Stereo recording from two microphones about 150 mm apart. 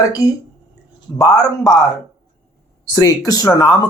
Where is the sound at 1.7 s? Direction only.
Centre (ahead or behind).